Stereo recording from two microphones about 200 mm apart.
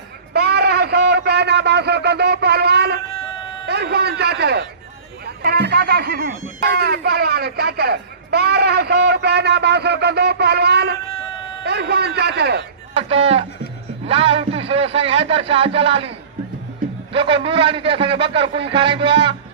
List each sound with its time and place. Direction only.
0.3 s a sound: 55° right (ahead or behind)
3.7 s speech: 55° right (ahead or behind)
5.2 s music: 50° right (ahead or behind)
6.6 s speech: 50° right (ahead or behind)
13.0 s a man's voice: 30° right (ahead or behind)